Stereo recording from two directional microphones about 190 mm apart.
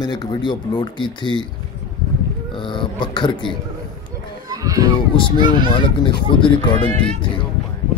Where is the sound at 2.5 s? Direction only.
25° left (ahead or behind).